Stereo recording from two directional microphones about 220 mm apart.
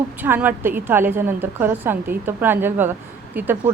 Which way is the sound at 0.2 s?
10° right (ahead or behind).